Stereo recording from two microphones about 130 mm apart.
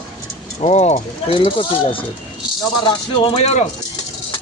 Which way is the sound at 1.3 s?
40° left (ahead or behind).